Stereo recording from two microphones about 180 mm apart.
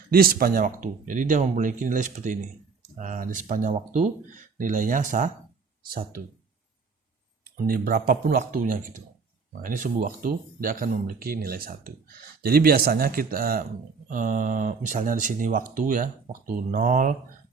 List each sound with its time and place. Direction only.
0.1 s speech: 55° right (ahead or behind)
7.4 s speech: 55° right (ahead or behind)